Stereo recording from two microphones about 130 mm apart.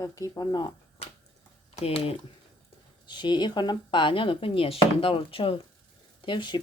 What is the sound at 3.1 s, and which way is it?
Speech, 35° left (ahead or behind).